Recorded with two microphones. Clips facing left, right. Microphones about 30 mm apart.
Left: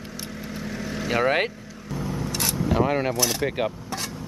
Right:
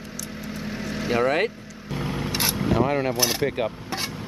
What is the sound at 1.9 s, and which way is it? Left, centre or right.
Vehicle, right.